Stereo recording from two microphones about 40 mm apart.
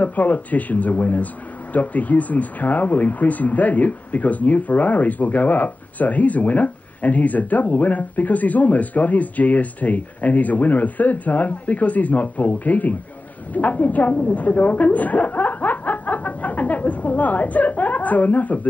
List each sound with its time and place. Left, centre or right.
0.0 s a woman's voice: left
14.1 s snicker: left